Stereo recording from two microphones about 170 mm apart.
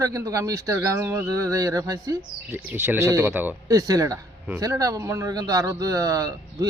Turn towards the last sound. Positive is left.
turn(degrees=-20)  # may be behind; listen again after turning